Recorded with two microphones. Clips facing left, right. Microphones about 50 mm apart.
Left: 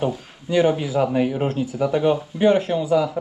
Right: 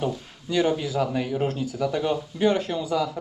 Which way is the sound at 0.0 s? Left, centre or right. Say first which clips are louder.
Left 4 dB; centre.